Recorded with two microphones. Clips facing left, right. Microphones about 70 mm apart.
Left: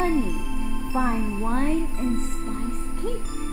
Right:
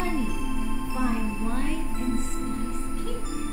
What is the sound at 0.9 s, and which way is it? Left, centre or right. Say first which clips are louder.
Speech: left 4 dB; left.